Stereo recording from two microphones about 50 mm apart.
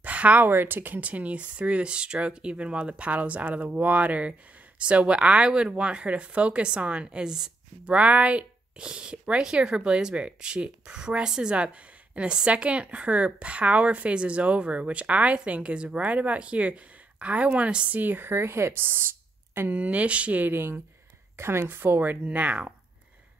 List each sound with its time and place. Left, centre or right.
0.0 s a sound: right
0.5 s speech: right
1.0 s speech: right; by 7.5 s centre
7.8 s speech: right
17.9 s speech: right
19.8 s speech: right
21.4 s speech: right
22.2 s speech: right